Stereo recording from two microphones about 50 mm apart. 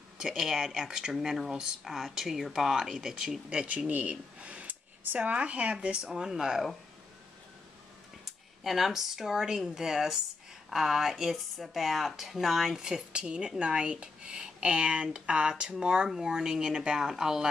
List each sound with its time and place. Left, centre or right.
0.2 s speech: centre
3.6 s speech: right; by 6.8 s centre
8.3 s speech: centre
13.1 s speech: right